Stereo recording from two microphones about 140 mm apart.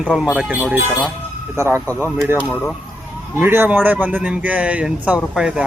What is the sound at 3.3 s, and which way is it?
Speech, 15° right (ahead or behind).